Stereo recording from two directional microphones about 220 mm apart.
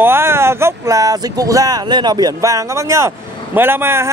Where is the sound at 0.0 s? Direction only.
10° right (ahead or behind).